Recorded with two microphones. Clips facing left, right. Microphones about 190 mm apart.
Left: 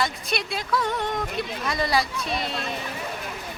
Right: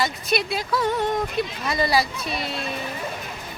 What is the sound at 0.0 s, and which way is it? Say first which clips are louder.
Speech: right 3 dB; 5° right (ahead or behind).